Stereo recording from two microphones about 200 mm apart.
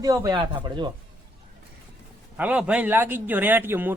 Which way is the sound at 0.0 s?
15° right (ahead or behind).